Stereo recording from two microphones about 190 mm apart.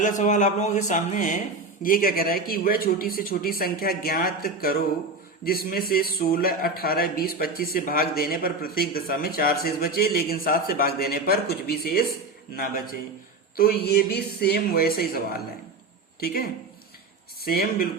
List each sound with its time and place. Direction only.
0.0 s a man's voice: 40° left (ahead or behind)